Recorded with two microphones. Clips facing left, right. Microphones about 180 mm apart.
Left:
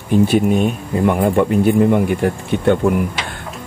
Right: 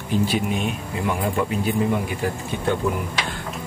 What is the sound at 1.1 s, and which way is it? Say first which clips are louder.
Speech: left 7 dB; 60° left (ahead or behind).